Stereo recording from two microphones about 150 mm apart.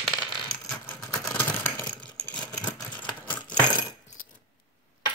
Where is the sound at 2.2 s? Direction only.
10° left (ahead or behind).